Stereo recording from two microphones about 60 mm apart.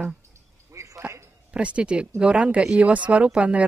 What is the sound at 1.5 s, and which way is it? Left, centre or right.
Speech, centre.